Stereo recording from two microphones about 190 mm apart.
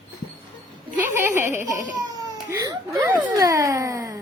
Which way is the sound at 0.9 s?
10° right (ahead or behind).